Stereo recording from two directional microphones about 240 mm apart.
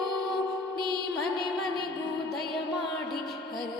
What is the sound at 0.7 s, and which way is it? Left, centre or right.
Music, centre.